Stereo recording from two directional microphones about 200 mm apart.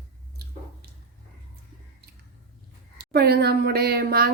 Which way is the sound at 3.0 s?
50° right (ahead or behind).